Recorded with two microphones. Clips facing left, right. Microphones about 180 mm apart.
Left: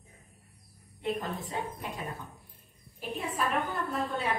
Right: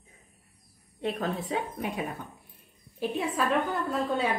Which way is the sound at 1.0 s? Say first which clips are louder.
Right 3 dB; 80° right.